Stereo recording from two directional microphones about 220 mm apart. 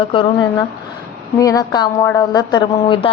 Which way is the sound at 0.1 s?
25° left (ahead or behind).